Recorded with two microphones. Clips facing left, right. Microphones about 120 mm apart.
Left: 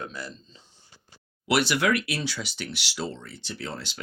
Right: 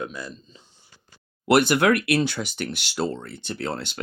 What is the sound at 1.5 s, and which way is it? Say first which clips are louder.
Speech: right 5 dB; 50° right (ahead or behind).